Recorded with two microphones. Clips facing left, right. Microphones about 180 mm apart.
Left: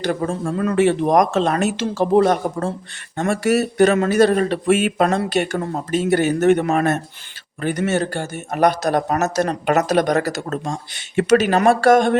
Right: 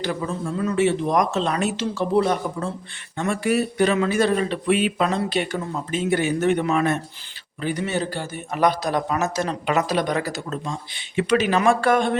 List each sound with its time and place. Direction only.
0.0 s speech: 50° left (ahead or behind)
7.6 s speech: 70° left (ahead or behind)
7.9 s speech: 50° left (ahead or behind)